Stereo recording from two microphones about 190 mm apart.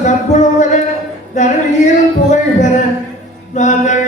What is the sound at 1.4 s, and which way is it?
Speech, 40° left (ahead or behind).